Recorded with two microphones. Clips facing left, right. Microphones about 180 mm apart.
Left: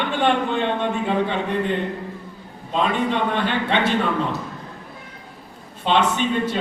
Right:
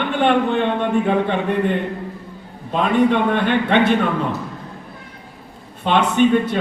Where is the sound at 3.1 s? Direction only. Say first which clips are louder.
Right 5 dB; 55° right (ahead or behind).